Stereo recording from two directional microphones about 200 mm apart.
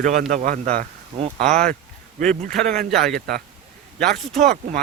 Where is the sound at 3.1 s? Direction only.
50° right (ahead or behind).